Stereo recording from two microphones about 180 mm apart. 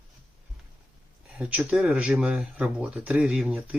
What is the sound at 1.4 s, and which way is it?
Speech, 5° right (ahead or behind).